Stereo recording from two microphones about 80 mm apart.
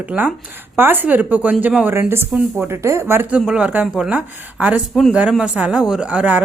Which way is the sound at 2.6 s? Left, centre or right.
Right.